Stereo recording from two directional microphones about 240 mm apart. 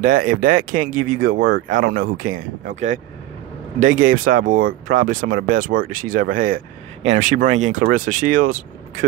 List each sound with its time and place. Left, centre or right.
0.0 s speech: right
3.8 s speech: right